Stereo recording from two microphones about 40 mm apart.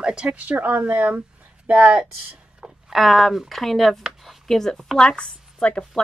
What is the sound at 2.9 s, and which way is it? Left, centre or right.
A woman's voice, centre.